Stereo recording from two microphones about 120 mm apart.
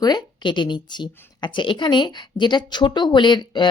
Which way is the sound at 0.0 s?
35° left (ahead or behind).